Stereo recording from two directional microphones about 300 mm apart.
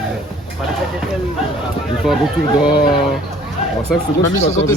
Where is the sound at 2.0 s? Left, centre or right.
Centre.